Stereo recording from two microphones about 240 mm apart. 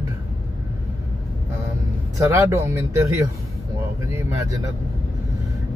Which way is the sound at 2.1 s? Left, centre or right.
Centre.